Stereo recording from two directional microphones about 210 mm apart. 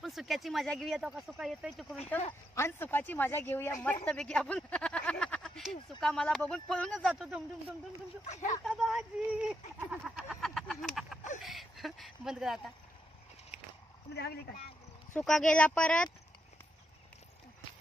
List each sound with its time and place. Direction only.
0.0 s speech: centre (ahead or behind)
2.5 s speech: 10° left (ahead or behind)
8.3 s speech: 35° left (ahead or behind)
8.6 s speech: centre (ahead or behind)
14.1 s speech: 50° left (ahead or behind)
15.1 s speech: centre (ahead or behind)